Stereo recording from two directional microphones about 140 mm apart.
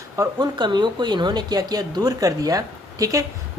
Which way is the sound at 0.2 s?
30° right (ahead or behind).